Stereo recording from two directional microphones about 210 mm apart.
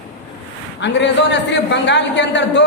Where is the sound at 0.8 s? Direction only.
55° left (ahead or behind).